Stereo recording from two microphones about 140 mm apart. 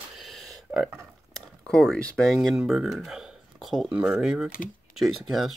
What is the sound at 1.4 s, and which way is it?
Speech, 5° left (ahead or behind).